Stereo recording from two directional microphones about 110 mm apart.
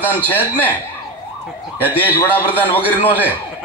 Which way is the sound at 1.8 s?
15° right (ahead or behind).